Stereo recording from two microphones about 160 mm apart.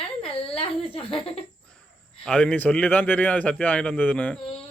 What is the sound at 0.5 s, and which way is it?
Speech, 35° left (ahead or behind).